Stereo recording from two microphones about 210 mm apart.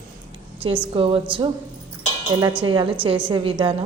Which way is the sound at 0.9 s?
25° right (ahead or behind).